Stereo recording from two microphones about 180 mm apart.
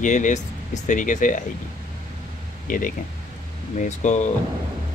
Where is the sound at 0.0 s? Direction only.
45° left (ahead or behind).